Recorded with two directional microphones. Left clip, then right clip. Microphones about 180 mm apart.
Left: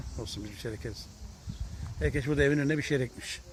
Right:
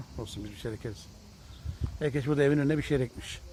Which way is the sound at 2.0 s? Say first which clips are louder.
Right 1 dB; 15° right (ahead or behind).